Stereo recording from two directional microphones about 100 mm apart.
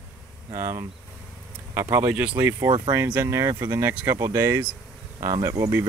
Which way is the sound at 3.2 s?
30° right (ahead or behind).